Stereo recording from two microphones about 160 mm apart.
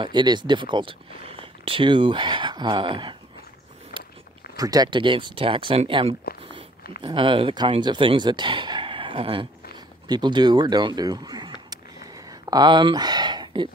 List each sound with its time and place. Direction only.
0.0 s speech: 30° right (ahead or behind)
4.6 s speech: 25° right (ahead or behind)
12.3 s a sound: 25° right (ahead or behind)